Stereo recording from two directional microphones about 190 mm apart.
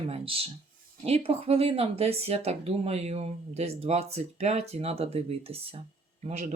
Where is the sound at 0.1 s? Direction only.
30° right (ahead or behind).